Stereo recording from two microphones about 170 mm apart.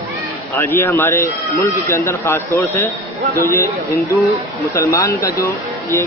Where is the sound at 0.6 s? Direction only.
15° left (ahead or behind).